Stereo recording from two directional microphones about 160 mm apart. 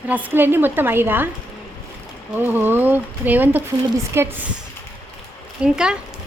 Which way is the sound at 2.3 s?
10° right (ahead or behind).